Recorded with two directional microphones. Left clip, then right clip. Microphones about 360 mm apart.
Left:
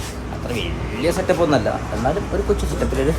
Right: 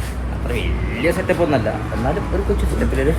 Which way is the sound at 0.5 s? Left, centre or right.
Centre.